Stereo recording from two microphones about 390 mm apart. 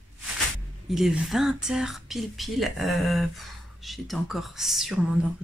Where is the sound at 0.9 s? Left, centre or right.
Centre.